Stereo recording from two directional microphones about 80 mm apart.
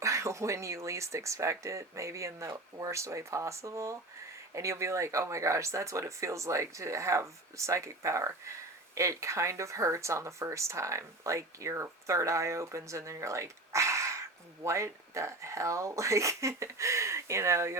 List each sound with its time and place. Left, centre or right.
0.0 s speech: right